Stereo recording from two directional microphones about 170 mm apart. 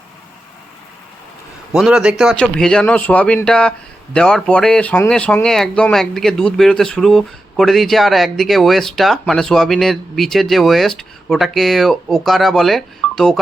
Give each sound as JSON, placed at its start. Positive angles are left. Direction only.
{"t": 1.7, "sound": "speech", "side_deg": -5}